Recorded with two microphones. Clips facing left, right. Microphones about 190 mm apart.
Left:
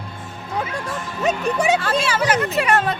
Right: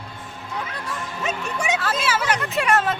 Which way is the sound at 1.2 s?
30° left (ahead or behind).